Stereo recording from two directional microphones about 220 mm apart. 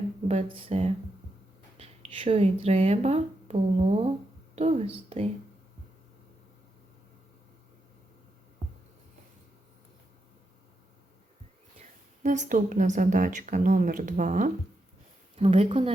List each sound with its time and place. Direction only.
0.3 s a woman's voice: 25° right (ahead or behind)
11.8 s a woman's voice: 35° right (ahead or behind)